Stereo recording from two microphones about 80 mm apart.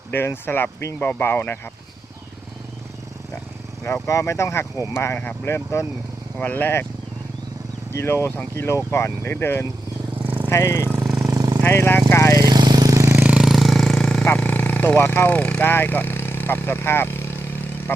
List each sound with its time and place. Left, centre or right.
0.1 s speech: left
3.8 s speech: left
7.9 s speech: left
10.2 s vehicle: right
10.5 s speech: left
11.0 s vehicle: right
11.6 s speech: left
12.1 s vehicle: left
12.4 s vehicle: right
13.2 s vehicle: centre
13.5 s vehicle: centre
14.3 s speech: centre